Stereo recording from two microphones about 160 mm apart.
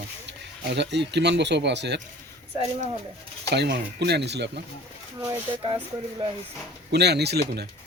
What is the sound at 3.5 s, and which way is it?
Speech, 90° right.